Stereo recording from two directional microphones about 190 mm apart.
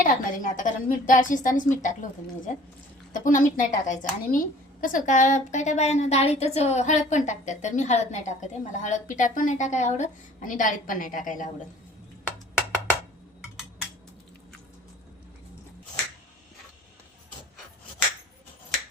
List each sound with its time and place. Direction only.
0.0 s a woman's voice: 45° left (ahead or behind)